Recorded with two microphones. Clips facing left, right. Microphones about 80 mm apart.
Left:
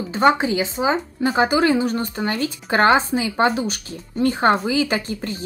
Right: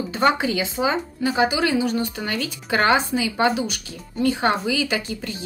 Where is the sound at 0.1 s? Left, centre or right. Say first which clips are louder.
Left 4 dB; left.